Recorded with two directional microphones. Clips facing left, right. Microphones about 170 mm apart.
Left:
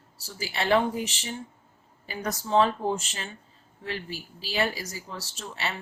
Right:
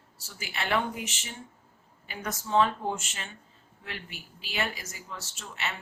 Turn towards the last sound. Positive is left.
turn(degrees=35)  # may be behind; listen again after turning